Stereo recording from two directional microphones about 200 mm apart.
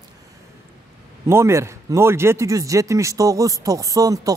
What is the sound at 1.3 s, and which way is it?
A man's voice, 15° right (ahead or behind).